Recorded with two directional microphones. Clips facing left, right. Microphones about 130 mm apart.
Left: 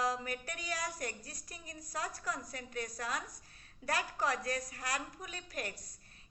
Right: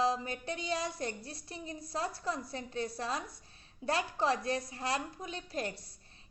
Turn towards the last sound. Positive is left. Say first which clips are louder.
# right 5 dB
turn(degrees=-30)  # may be behind; listen again after turning